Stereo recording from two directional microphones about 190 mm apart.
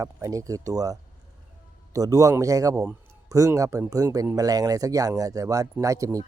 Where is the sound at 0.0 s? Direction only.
15° right (ahead or behind).